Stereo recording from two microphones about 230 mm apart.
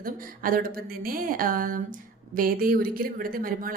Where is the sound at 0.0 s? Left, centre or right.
Right.